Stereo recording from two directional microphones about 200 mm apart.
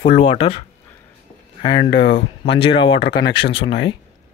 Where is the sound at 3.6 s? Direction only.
65° left (ahead or behind).